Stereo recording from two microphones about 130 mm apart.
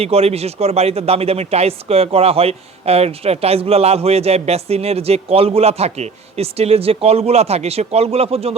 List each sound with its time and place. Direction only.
0.0 s speech: 50° right (ahead or behind)